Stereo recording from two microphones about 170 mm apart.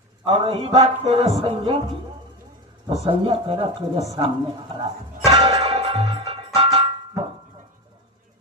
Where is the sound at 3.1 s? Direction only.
30° right (ahead or behind).